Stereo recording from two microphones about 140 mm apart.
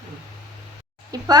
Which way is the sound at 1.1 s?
25° right (ahead or behind).